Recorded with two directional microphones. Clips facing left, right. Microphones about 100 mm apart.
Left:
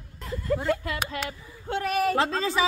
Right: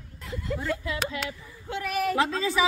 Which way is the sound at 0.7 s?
50° left (ahead or behind).